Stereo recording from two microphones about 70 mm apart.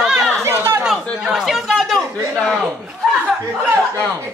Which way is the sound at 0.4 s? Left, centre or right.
Right.